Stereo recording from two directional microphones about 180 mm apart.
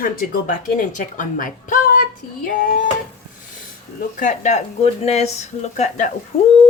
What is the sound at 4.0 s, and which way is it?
Speech, 45° left (ahead or behind).